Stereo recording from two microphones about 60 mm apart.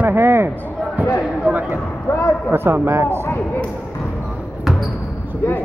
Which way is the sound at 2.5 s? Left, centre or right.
Right.